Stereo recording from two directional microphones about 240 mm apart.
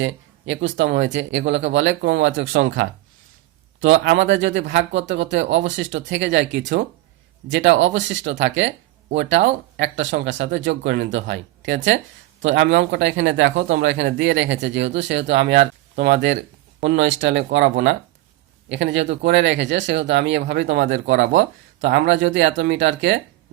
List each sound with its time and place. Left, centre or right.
0.0 s speech: right
9.7 s speech: right